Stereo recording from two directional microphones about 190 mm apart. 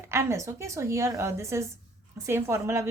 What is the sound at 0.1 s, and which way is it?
A woman's voice, 15° right (ahead or behind).